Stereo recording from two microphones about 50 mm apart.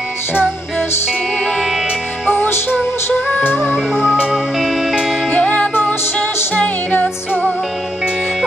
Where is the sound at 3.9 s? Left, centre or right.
Centre.